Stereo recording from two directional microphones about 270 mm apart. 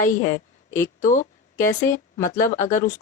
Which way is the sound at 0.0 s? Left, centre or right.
Left.